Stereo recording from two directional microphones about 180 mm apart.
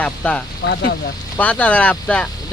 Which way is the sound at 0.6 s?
75° left (ahead or behind).